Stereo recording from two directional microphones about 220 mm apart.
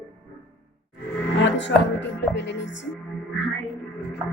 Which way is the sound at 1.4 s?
55° left (ahead or behind).